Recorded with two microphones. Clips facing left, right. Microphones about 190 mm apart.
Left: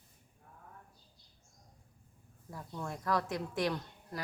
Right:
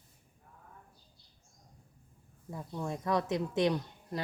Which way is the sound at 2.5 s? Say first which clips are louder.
Right 4 dB; 20° right (ahead or behind).